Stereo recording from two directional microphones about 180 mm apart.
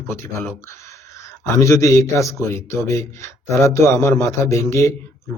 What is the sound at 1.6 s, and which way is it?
A man's voice, 15° left (ahead or behind).